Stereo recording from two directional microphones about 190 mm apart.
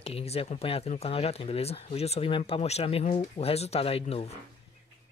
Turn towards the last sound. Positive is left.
turn(degrees=35)  # may be behind; listen again after turning